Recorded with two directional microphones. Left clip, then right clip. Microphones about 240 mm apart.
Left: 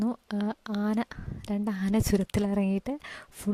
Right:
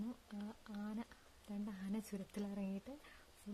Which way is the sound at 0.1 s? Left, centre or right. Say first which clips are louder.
Left 19 dB; left.